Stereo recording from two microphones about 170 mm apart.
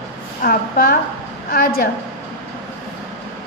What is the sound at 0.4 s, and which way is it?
A woman's voice, 60° left (ahead or behind).